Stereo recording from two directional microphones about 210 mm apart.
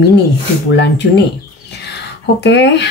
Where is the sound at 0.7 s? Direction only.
55° left (ahead or behind).